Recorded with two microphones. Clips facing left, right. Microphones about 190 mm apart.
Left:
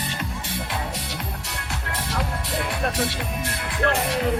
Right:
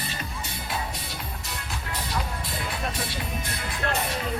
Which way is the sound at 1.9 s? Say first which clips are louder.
Left 3 dB; 75° left (ahead or behind).